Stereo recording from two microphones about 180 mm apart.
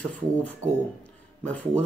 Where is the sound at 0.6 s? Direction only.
15° right (ahead or behind).